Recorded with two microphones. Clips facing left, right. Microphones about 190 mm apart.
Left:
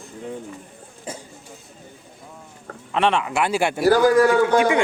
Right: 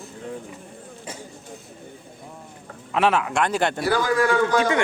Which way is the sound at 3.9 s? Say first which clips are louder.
Left 8 dB; 40° left (ahead or behind).